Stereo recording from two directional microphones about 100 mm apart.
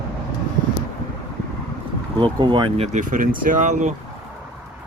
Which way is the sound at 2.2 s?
50° right (ahead or behind).